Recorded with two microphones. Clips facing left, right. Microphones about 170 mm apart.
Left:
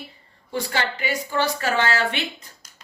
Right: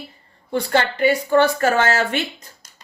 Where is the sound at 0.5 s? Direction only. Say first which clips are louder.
Right 6 dB; 55° right (ahead or behind).